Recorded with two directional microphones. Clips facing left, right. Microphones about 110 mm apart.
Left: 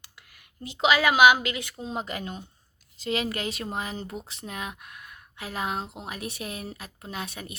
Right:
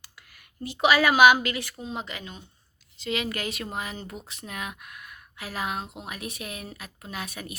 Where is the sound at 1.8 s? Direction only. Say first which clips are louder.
Left 3 dB; 40° left (ahead or behind).